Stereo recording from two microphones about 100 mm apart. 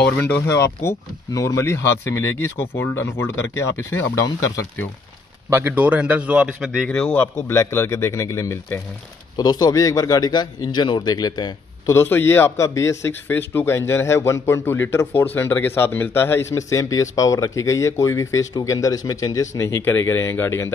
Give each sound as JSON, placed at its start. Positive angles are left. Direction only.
{"t": 0.3, "sound": "a man's voice", "side_deg": 25}
{"t": 5.5, "sound": "a man's voice", "side_deg": -20}
{"t": 6.9, "sound": "a man's voice", "side_deg": 10}
{"t": 7.3, "sound": "a man's voice", "side_deg": 25}
{"t": 9.4, "sound": "speech", "side_deg": 40}
{"t": 11.9, "sound": "a man's voice", "side_deg": 20}